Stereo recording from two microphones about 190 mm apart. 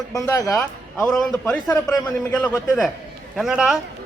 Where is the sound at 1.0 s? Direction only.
Centre (ahead or behind).